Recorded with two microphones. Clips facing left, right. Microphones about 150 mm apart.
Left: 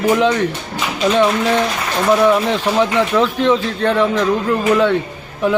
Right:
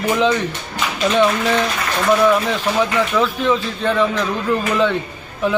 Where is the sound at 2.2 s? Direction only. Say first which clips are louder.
Left 2 dB; 15° left (ahead or behind).